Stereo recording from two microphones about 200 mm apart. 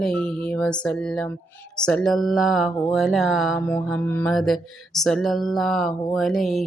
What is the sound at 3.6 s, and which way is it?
Speech, 10° left (ahead or behind).